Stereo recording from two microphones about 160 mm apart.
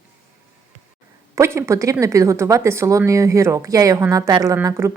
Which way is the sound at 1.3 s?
15° right (ahead or behind).